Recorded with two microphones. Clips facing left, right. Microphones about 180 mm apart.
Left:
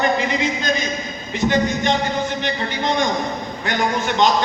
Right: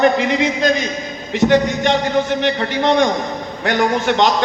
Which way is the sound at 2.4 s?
70° right (ahead or behind).